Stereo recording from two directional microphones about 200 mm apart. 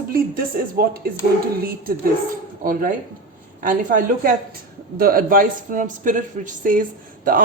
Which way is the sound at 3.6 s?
40° right (ahead or behind).